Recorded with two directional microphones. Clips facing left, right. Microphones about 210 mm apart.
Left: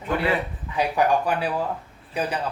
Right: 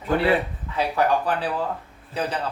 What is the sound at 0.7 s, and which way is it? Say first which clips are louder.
Speech: left 1 dB; 15° left (ahead or behind).